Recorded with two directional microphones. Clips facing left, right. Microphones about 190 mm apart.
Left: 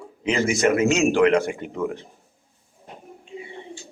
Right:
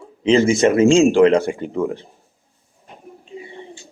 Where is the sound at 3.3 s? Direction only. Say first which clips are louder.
Right 1 dB; 35° right (ahead or behind).